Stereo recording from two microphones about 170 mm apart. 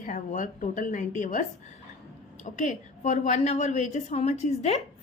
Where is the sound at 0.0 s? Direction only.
50° left (ahead or behind).